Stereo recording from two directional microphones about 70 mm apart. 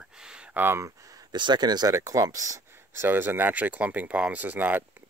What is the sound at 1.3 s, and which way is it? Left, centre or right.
Speech, right.